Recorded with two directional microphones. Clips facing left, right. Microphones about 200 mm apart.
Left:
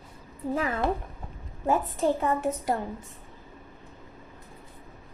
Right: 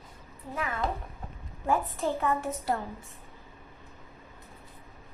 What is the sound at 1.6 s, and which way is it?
A woman's voice, 15° left (ahead or behind).